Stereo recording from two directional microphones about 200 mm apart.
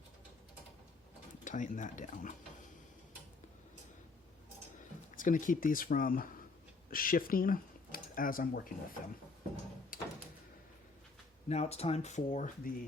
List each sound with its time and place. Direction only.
1.5 s speech: 40° left (ahead or behind)
5.1 s speech: 40° left (ahead or behind)
9.9 s door: 45° left (ahead or behind)
11.4 s speech: 30° left (ahead or behind)